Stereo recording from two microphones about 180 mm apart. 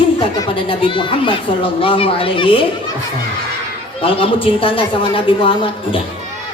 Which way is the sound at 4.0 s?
30° left (ahead or behind).